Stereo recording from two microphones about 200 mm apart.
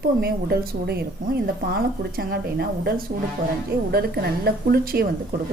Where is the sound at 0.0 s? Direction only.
50° right (ahead or behind).